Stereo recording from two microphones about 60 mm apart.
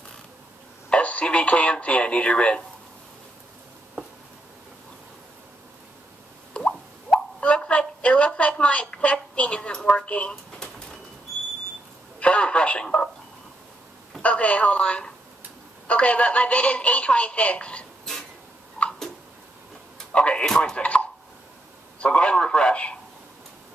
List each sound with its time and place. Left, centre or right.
0.8 s speech: left
6.5 s plop: centre
12.2 s telephone: centre
14.2 s a sound: left
20.4 s a man's voice: centre